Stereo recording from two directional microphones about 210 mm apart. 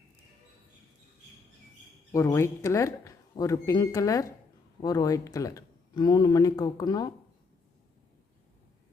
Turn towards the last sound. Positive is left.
turn(degrees=20)  # may be behind; listen again after turning